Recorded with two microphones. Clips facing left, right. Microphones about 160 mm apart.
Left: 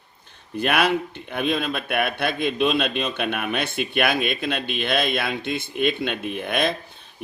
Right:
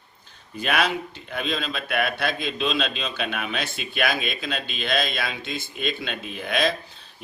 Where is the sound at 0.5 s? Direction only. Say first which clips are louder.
Left 3 dB; 55° left (ahead or behind).